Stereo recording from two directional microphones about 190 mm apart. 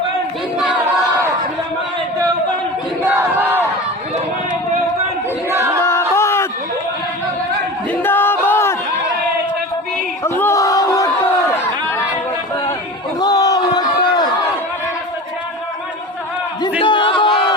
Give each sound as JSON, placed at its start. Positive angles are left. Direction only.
{"t": 3.0, "sound": "battle cry", "side_deg": -10}
{"t": 5.5, "sound": "a sound", "side_deg": -15}
{"t": 5.8, "sound": "a sound", "side_deg": 15}
{"t": 8.0, "sound": "battle cry", "side_deg": 10}
{"t": 10.2, "sound": "crowd", "side_deg": 10}
{"t": 13.1, "sound": "crowd", "side_deg": 20}
{"t": 16.8, "sound": "crowd", "side_deg": 25}